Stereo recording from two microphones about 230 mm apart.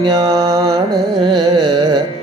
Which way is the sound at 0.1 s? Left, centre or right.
Centre.